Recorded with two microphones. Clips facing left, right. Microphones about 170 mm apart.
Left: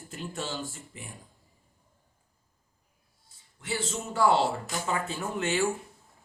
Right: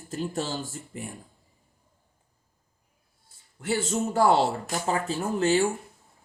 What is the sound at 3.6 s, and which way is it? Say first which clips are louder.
Speech: right 7 dB; 50° right (ahead or behind).